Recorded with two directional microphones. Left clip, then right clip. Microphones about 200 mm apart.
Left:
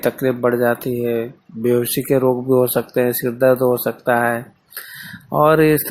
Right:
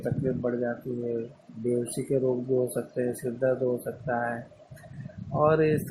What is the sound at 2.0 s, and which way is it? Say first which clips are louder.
Speech: left 10 dB; 30° left (ahead or behind).